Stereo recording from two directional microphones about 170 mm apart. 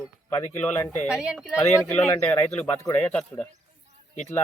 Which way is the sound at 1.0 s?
5° right (ahead or behind).